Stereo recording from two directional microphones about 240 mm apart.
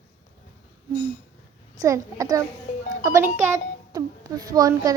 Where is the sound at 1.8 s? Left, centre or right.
Centre.